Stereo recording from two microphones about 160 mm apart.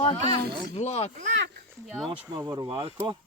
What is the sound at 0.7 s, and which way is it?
Speech, 45° left (ahead or behind).